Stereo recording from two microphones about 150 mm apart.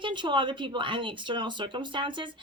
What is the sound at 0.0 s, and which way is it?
Speech, 30° right (ahead or behind).